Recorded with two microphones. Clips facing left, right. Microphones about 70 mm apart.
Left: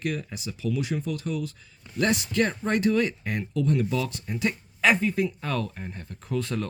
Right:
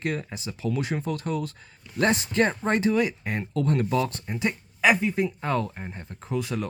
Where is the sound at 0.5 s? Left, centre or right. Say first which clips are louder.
Even; right.